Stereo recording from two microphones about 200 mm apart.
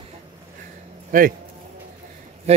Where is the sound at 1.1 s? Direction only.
45° right (ahead or behind).